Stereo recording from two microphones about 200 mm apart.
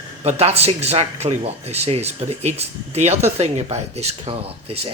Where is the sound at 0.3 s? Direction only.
30° right (ahead or behind).